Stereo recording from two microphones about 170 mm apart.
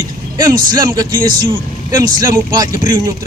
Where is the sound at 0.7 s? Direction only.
20° right (ahead or behind).